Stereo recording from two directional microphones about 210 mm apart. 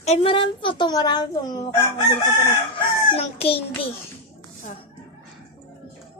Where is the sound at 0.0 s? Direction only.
30° left (ahead or behind).